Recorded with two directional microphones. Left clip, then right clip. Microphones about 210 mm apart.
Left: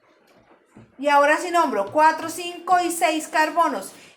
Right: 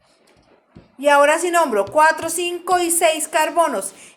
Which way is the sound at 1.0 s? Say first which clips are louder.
Right 4 dB; 45° right (ahead or behind).